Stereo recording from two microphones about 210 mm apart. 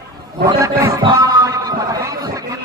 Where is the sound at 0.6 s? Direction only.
15° right (ahead or behind).